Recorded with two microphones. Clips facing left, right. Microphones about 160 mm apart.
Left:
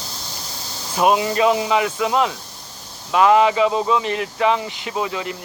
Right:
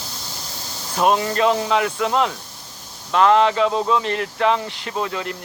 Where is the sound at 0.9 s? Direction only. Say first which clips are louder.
Left 1 dB; 5° left (ahead or behind).